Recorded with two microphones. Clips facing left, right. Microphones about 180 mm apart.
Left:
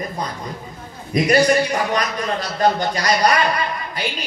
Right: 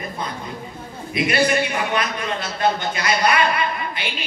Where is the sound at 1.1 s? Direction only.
40° left (ahead or behind).